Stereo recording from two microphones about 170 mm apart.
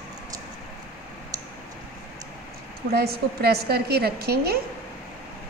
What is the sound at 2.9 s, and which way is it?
A woman's voice, 70° right (ahead or behind).